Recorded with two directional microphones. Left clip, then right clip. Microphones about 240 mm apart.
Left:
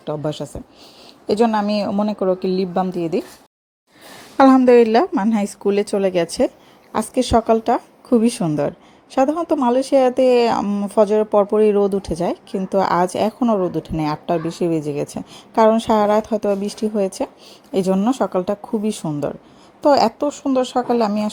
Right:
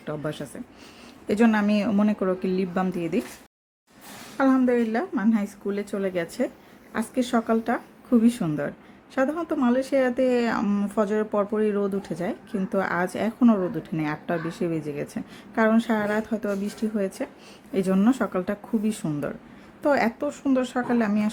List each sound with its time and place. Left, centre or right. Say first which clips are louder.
0.0 s speech: left 7 dB; centre
4.4 s speech: left 11 dB; left